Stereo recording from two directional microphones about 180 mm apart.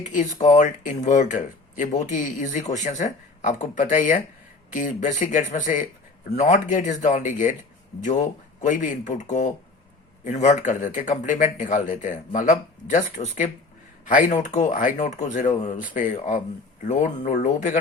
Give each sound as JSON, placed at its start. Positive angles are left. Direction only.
{"t": 0.1, "sound": "speech", "side_deg": 45}